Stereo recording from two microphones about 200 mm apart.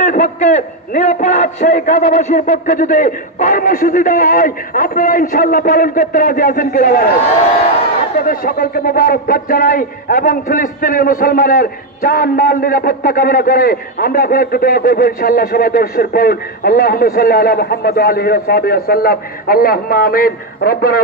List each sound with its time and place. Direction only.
0.0 s a man's voice: 40° left (ahead or behind)
8.2 s a man's voice: 45° left (ahead or behind)